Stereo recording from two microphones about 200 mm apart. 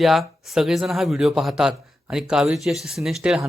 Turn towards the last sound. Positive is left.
turn(degrees=0)  # may be behind; listen again after turning